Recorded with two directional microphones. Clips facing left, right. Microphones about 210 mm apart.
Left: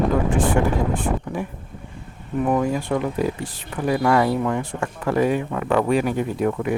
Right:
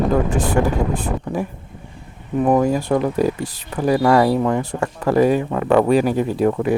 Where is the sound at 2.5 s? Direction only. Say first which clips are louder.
Right 5 dB; 40° right (ahead or behind).